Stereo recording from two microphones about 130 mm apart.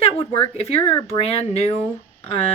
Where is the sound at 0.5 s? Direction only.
50° left (ahead or behind).